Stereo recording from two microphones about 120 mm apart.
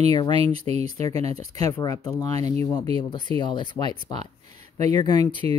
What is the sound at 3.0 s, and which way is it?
Speech, 40° left (ahead or behind).